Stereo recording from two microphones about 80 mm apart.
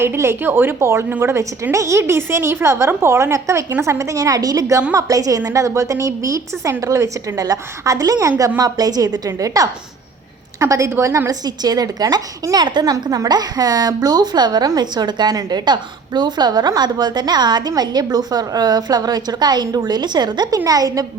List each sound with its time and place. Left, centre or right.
0.0 s a woman's voice: right
11.3 s a woman's voice: right
12.9 s a woman's voice: right
20.7 s a woman's voice: right